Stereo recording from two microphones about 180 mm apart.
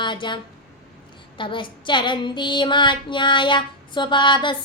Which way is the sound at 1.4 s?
25° left (ahead or behind).